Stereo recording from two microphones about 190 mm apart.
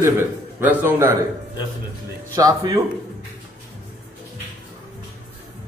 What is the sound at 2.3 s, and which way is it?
Speech, 20° right (ahead or behind).